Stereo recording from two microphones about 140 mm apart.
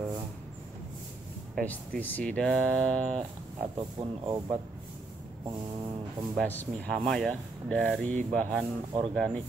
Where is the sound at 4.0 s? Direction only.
30° right (ahead or behind).